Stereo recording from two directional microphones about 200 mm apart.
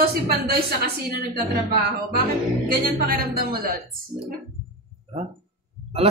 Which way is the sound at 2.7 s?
50° right (ahead or behind).